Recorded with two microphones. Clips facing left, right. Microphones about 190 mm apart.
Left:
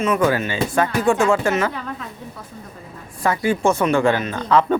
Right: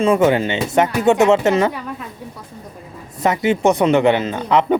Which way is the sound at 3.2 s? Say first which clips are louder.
Right 3 dB; 20° right (ahead or behind).